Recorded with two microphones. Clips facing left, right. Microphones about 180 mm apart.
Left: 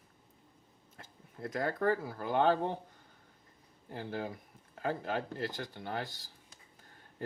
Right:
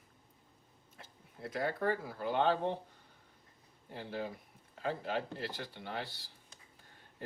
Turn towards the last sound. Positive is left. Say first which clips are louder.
# left 3 dB
turn(degrees=45)  # may be behind; listen again after turning